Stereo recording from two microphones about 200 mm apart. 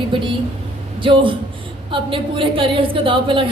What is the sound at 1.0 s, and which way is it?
A woman's voice, 25° right (ahead or behind).